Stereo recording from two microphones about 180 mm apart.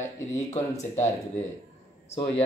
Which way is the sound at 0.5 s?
40° left (ahead or behind).